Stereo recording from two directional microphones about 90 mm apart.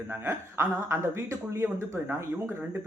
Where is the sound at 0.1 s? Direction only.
25° right (ahead or behind).